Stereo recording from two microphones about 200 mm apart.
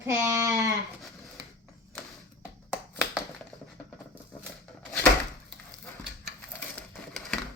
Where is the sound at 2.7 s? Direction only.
Centre (ahead or behind).